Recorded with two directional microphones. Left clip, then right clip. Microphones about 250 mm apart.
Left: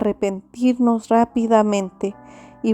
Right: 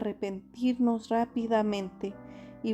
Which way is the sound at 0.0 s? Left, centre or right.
Left.